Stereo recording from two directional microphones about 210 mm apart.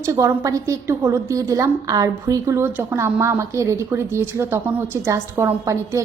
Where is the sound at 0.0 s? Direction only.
15° right (ahead or behind).